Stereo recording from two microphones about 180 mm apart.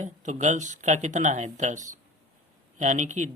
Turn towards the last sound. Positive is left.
turn(degrees=-40)  # may be behind; listen again after turning